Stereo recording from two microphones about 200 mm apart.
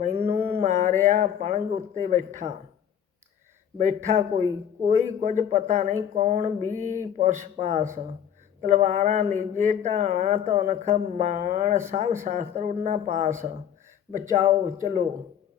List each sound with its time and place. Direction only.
0.2 s speech: 30° right (ahead or behind)
3.8 s speech: 40° right (ahead or behind)
6.7 s a sound: 10° left (ahead or behind)
7.2 s speech: 40° right (ahead or behind)
10.9 s a sound: 40° right (ahead or behind)
12.2 s speech: 40° right (ahead or behind)